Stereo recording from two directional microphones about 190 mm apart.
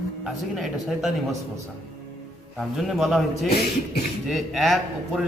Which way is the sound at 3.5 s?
55° left (ahead or behind).